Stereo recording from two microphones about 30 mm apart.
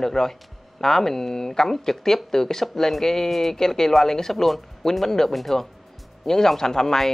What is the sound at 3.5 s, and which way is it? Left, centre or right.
Speech, centre.